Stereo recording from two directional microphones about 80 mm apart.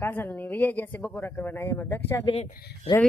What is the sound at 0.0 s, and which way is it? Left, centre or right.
A woman's voice, left.